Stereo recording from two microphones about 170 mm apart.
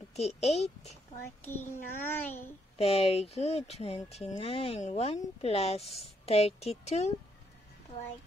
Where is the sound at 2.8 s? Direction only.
35° left (ahead or behind).